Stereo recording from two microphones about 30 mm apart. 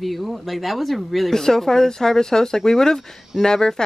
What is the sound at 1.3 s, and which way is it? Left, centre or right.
A man's voice, centre.